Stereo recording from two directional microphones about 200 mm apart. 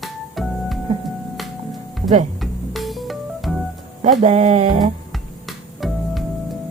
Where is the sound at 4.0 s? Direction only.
35° right (ahead or behind).